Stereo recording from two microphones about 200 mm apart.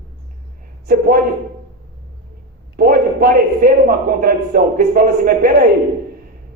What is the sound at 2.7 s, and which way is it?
A man's voice, 50° right (ahead or behind).